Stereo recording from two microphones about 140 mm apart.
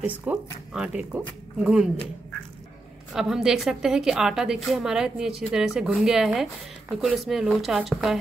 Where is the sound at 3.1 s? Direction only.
5° right (ahead or behind).